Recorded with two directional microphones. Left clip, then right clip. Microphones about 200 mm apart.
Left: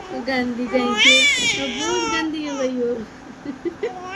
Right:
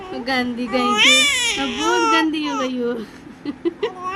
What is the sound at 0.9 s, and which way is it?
Speech, 35° right (ahead or behind).